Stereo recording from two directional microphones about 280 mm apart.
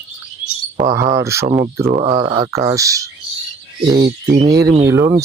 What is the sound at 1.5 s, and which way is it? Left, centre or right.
Speech, right.